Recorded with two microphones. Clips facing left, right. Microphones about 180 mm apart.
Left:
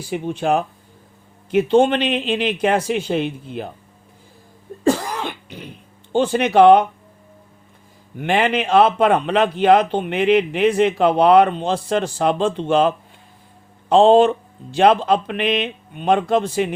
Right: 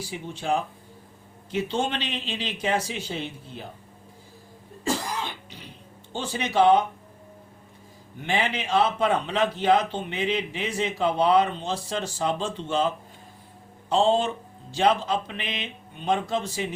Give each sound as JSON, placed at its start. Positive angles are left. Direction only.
{"t": 0.0, "sound": "a man's voice", "side_deg": 60}
{"t": 4.8, "sound": "cough", "side_deg": 60}
{"t": 6.1, "sound": "a man's voice", "side_deg": 60}
{"t": 8.2, "sound": "a man's voice", "side_deg": 60}
{"t": 13.9, "sound": "a man's voice", "side_deg": 60}